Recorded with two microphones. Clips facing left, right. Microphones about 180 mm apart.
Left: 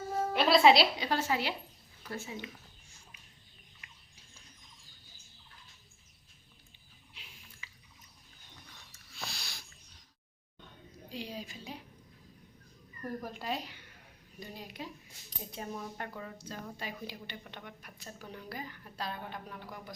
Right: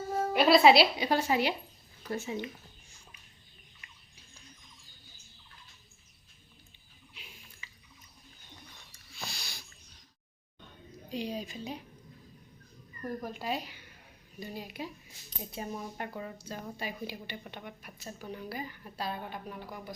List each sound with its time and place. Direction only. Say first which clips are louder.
0.1 s a woman's voice: right 3 dB; 5° right (ahead or behind); by 2.4 s 20° right (ahead or behind)
9.1 s a sound: right 1 dB; centre (ahead or behind)
11.1 s a woman's voice: right 6 dB; 20° right (ahead or behind)
13.0 s speech: right 2 dB; 5° right (ahead or behind)